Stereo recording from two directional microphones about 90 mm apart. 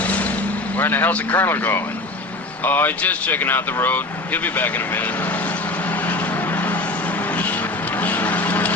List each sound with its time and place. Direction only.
0.0 s vehicle: 15° left (ahead or behind)
0.8 s speech: 20° left (ahead or behind)
6.1 s vehicle: 20° left (ahead or behind)
7.9 s a sound: 20° left (ahead or behind)